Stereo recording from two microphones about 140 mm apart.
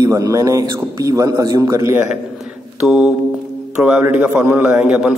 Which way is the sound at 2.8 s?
5° right (ahead or behind).